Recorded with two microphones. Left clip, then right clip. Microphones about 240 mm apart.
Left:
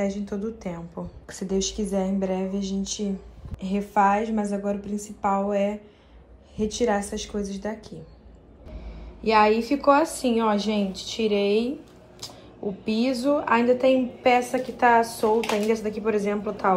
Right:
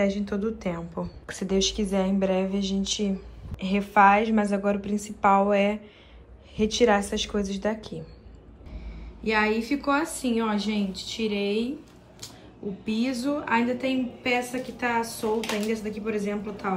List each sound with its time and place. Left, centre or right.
0.0 s speech: centre
9.2 s a woman's voice: centre
10.6 s speech: right
13.2 s a woman's voice: centre